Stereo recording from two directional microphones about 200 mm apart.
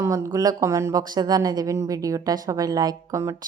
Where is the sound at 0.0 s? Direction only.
15° right (ahead or behind).